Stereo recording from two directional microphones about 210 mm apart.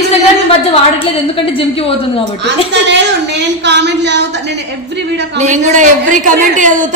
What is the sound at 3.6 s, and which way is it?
Speech, 55° right (ahead or behind).